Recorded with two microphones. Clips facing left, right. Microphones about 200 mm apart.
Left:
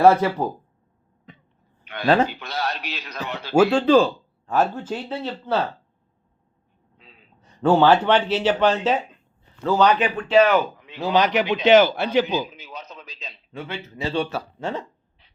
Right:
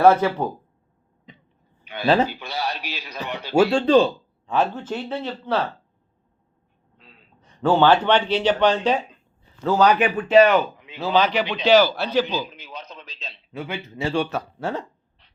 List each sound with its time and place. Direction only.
0.0 s speech: 10° left (ahead or behind)
1.9 s a man's voice: 5° right (ahead or behind)
3.5 s speech: 5° left (ahead or behind)
7.6 s speech: 10° left (ahead or behind)
9.6 s speech: 5° right (ahead or behind)
10.8 s a sound: 5° right (ahead or behind)
11.0 s a man's voice: 15° left (ahead or behind)
12.5 s a sound: 5° left (ahead or behind)
13.5 s a man's voice: 10° right (ahead or behind)